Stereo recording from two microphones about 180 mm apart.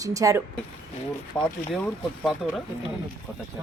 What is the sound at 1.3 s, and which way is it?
Speech, 5° left (ahead or behind).